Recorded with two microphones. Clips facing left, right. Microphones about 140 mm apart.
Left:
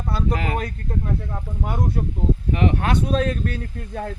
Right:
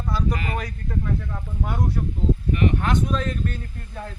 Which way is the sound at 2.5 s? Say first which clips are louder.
Left 2 dB; 90° left.